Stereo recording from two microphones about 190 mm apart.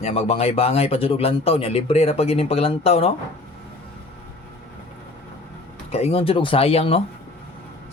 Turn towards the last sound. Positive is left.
turn(degrees=30)  # may be behind; listen again after turning